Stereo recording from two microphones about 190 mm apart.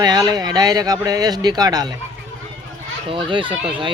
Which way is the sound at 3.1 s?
25° right (ahead or behind).